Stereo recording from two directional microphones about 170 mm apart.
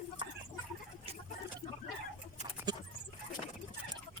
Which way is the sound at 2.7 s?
25° right (ahead or behind).